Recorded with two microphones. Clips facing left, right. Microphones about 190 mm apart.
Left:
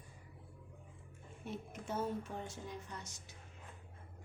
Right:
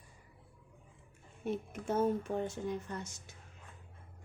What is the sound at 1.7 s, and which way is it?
Speech, 50° right (ahead or behind).